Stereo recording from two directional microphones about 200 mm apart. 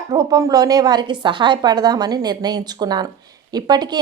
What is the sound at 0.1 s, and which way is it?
A woman's voice, 20° right (ahead or behind).